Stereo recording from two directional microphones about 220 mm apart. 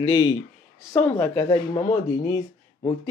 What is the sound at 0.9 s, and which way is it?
Speech, 5° left (ahead or behind).